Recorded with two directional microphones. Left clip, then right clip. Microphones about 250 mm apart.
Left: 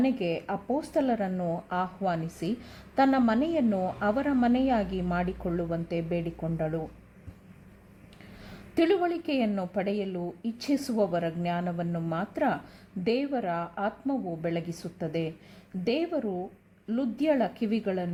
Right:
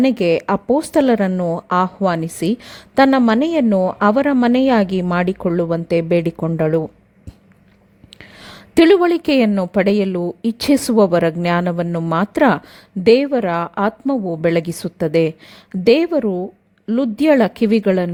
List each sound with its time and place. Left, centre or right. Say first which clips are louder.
0.0 s speech: right 13 dB; right
8.4 s speech: right 14 dB; right